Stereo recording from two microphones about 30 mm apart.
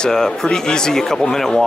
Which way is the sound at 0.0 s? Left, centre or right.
Centre.